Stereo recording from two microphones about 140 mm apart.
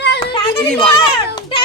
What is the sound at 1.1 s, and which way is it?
Speech, 35° left (ahead or behind).